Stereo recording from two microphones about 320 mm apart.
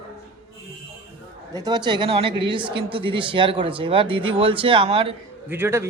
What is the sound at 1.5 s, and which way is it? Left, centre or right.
Speech, centre.